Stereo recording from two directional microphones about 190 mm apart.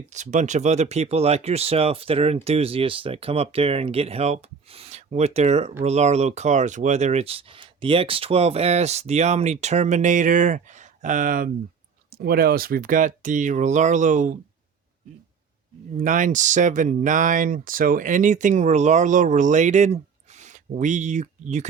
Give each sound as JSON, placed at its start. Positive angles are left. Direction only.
{"t": 0.1, "sound": "speech", "side_deg": -40}
{"t": 16.0, "sound": "speech", "side_deg": -45}